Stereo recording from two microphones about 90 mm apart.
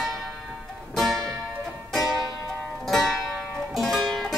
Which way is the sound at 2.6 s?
Centre (ahead or behind).